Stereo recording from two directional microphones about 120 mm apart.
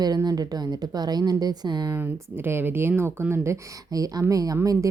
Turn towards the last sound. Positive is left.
turn(degrees=-30)  # may be behind; listen again after turning